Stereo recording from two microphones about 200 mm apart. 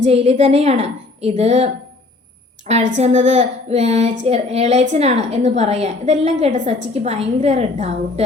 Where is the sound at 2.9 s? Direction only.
35° right (ahead or behind).